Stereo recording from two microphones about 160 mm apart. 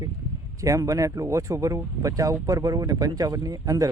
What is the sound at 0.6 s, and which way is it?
Speech, 20° right (ahead or behind).